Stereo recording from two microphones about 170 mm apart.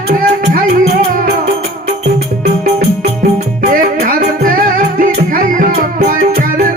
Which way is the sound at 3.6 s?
55° right (ahead or behind).